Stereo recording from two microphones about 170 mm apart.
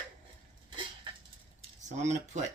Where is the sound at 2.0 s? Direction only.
40° right (ahead or behind).